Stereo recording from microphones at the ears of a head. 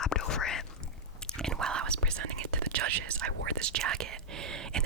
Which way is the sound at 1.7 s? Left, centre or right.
Right.